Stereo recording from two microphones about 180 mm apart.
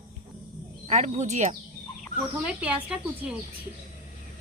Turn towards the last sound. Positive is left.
turn(degrees=-5)  # may be behind; listen again after turning